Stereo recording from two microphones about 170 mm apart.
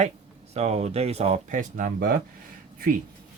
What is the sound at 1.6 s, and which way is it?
Speech, 50° right (ahead or behind).